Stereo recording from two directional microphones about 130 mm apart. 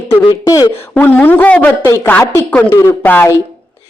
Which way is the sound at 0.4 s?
25° left (ahead or behind).